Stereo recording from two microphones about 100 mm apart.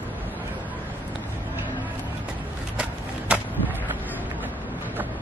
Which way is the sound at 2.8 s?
10° right (ahead or behind).